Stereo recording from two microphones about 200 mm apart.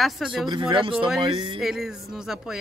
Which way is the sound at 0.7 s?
25° right (ahead or behind).